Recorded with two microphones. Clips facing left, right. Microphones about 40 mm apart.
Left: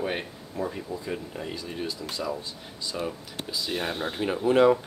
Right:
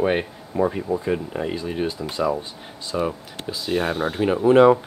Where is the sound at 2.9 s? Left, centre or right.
Centre.